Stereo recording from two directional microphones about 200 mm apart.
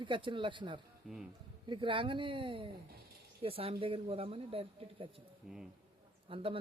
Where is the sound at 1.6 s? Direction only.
25° right (ahead or behind).